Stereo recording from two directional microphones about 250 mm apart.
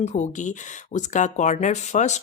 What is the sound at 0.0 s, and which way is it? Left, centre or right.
Speech, left.